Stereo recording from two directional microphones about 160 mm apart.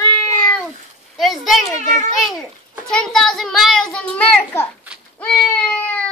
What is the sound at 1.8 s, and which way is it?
Speech, 50° right (ahead or behind).